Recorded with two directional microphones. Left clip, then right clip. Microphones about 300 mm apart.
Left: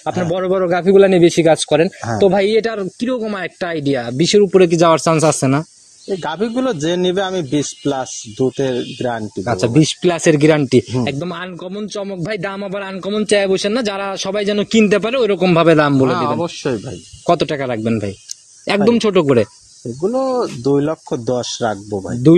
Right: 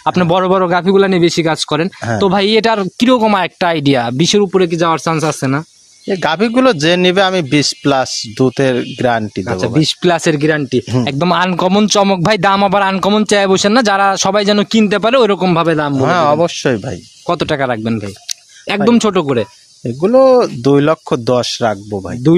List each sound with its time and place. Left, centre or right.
0.1 s speech: right
4.6 s speech: centre
6.0 s a man's voice: right
9.4 s speech: centre
9.8 s speech: centre
10.3 s speech: centre
11.1 s speech: right
14.8 s speech: centre
15.5 s speech: centre
16.1 s a man's voice: right
17.4 s speech: right
20.0 s a man's voice: right